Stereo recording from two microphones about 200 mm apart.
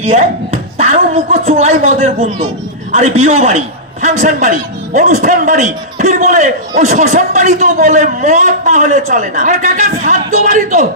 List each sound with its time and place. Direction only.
0.0 s a man's voice: 30° right (ahead or behind)